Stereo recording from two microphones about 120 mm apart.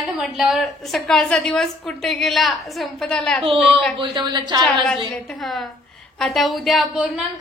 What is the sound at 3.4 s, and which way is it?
Speech, 50° right (ahead or behind).